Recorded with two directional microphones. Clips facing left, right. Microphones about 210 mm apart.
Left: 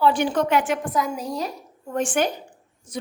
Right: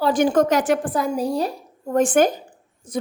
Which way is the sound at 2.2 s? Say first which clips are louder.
Right 5 dB; 45° right (ahead or behind).